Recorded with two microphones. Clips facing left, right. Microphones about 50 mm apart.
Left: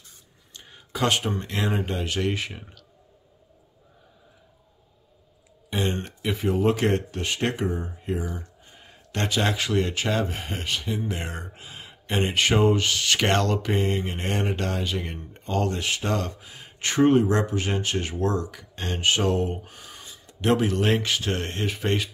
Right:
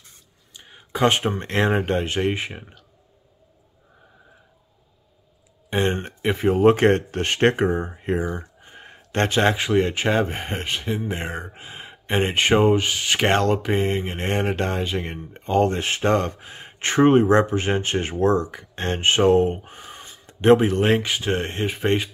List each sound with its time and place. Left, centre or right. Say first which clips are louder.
0.5 s a sound: right 5 dB; centre; by 1.4 s right
1.4 s speech: right 6 dB; right
5.7 s speech: right 5 dB; right